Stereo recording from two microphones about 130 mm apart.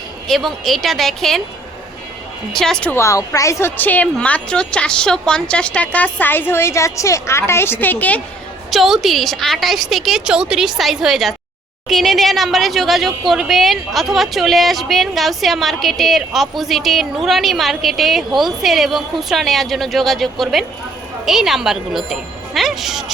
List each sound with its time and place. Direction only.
0.3 s a woman's voice: centre (ahead or behind)
2.5 s a woman's voice: 5° left (ahead or behind)
2.9 s a woman's voice: 25° left (ahead or behind)
8.7 s a woman's voice: centre (ahead or behind)